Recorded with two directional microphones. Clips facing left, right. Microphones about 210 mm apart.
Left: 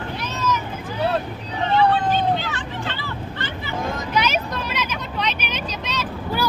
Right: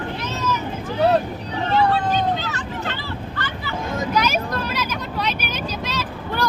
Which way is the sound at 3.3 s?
25° left (ahead or behind).